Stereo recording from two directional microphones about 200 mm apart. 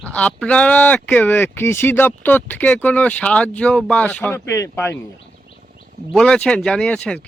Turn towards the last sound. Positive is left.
turn(degrees=5)  # may be behind; listen again after turning